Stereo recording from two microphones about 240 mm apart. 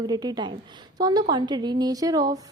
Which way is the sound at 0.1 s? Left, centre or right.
Centre.